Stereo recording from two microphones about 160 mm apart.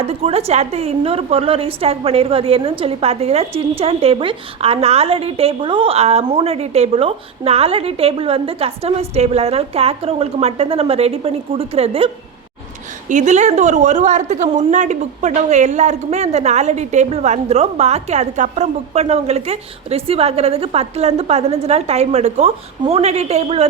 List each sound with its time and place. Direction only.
0.0 s a woman's voice: 40° right (ahead or behind)
13.1 s a woman's voice: 50° right (ahead or behind)